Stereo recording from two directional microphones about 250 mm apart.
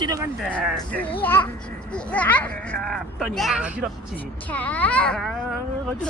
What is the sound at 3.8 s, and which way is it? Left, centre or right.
Speech, centre.